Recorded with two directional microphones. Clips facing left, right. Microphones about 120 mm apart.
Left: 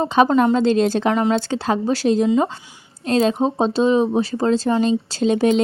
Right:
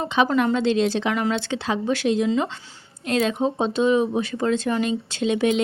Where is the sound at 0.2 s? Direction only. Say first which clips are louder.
Left 5 dB; 45° left (ahead or behind).